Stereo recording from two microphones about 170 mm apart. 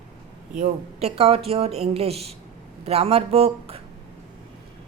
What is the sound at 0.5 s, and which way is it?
Speech, 40° right (ahead or behind).